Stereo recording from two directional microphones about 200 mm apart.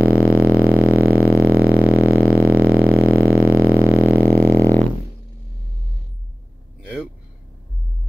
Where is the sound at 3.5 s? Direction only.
90° right.